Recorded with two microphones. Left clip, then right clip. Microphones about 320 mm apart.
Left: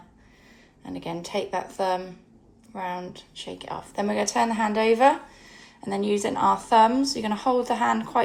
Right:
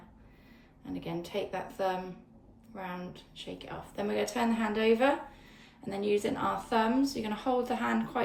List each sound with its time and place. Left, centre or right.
0.9 s a woman's voice: centre